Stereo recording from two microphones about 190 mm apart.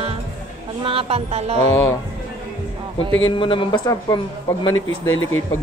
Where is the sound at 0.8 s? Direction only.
30° right (ahead or behind).